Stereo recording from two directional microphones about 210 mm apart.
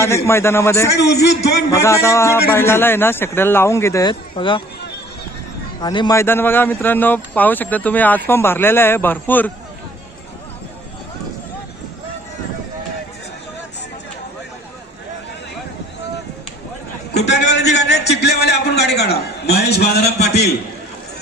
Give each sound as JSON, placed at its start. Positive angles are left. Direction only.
{"t": 0.3, "sound": "speech", "side_deg": 10}
{"t": 0.9, "sound": "a man's voice", "side_deg": 50}
{"t": 1.7, "sound": "speech", "side_deg": 15}
{"t": 5.8, "sound": "speech", "side_deg": 20}
{"t": 17.2, "sound": "a man's voice", "side_deg": 55}